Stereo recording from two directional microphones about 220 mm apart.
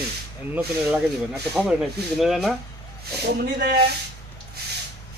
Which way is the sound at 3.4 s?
45° right (ahead or behind).